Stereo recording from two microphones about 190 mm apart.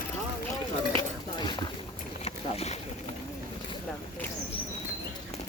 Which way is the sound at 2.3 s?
35° left (ahead or behind).